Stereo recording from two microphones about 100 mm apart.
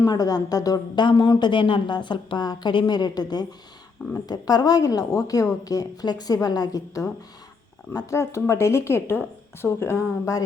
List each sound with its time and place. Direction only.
0.0 s a woman's voice: 40° left (ahead or behind)